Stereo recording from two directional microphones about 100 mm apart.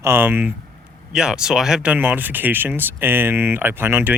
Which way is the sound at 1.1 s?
5° right (ahead or behind).